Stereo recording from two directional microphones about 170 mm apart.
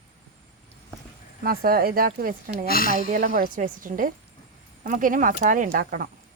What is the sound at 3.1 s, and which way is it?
A woman's voice, 60° right (ahead or behind).